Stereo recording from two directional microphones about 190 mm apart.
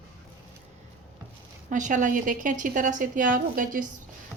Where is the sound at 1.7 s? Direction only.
40° right (ahead or behind).